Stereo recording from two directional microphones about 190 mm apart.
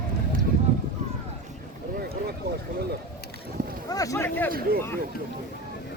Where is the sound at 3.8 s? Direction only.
20° left (ahead or behind).